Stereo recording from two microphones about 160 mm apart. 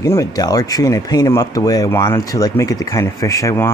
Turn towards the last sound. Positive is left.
turn(degrees=20)  # may be behind; listen again after turning